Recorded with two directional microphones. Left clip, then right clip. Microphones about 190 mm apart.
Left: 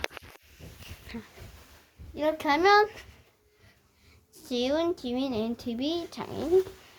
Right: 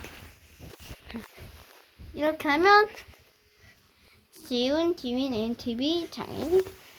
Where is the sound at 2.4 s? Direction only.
5° left (ahead or behind).